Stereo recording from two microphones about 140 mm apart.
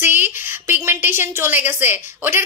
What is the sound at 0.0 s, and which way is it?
A woman's voice, 15° right (ahead or behind).